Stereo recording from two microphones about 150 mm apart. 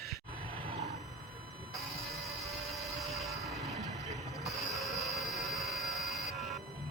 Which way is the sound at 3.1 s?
Centre (ahead or behind).